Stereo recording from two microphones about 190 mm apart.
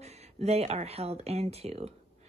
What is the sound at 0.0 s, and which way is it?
Speech, 35° right (ahead or behind).